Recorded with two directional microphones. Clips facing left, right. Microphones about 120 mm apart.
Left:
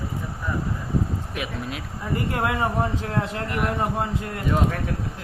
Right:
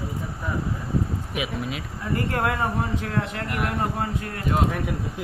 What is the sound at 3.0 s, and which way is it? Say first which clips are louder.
Speech: left 1 dB; 30° left (ahead or behind).